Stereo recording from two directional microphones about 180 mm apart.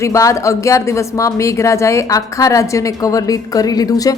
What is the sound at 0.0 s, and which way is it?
A woman's voice, 15° left (ahead or behind).